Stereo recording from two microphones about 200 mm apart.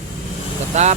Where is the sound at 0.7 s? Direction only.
35° right (ahead or behind).